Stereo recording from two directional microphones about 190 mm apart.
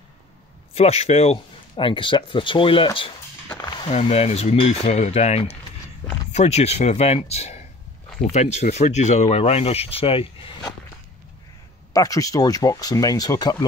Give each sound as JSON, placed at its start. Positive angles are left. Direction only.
{"t": 0.7, "sound": "speech", "side_deg": 35}
{"t": 11.9, "sound": "speech", "side_deg": 20}